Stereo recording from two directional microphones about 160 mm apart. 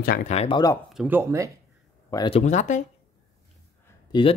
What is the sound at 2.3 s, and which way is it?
Speech, 45° left (ahead or behind).